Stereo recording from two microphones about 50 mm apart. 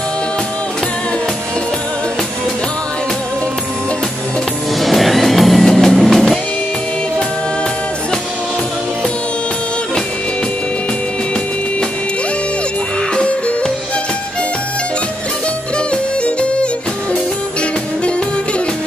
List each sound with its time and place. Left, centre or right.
4.7 s music: centre
13.1 s music: centre
15.9 s music: left